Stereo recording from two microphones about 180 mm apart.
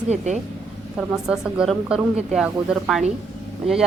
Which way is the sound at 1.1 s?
5° right (ahead or behind).